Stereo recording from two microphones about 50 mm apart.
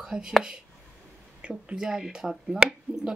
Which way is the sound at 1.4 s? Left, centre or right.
Centre.